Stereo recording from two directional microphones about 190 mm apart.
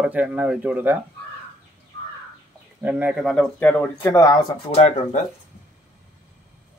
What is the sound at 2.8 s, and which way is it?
Speech, 5° right (ahead or behind).